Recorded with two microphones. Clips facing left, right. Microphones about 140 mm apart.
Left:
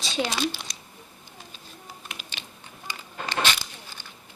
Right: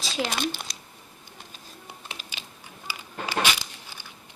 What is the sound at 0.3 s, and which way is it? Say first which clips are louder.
Speech: left 1 dB; 50° right (ahead or behind).